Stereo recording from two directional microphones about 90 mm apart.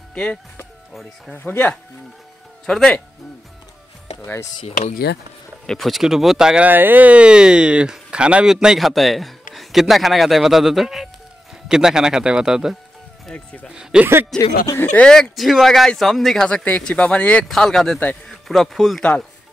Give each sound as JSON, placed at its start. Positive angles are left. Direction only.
{"t": 0.1, "sound": "speech", "side_deg": 10}
{"t": 2.6, "sound": "speech", "side_deg": 5}
{"t": 5.7, "sound": "speech", "side_deg": 0}
{"t": 6.7, "sound": "speech", "side_deg": -20}
{"t": 13.3, "sound": "speech", "side_deg": 15}
{"t": 13.9, "sound": "speech", "side_deg": -10}
{"t": 14.3, "sound": "speech", "side_deg": 5}
{"t": 16.4, "sound": "speech", "side_deg": 15}
{"t": 17.5, "sound": "speech", "side_deg": 5}